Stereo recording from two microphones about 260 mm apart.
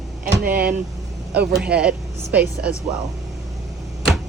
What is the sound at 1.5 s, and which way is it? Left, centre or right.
Speech, centre.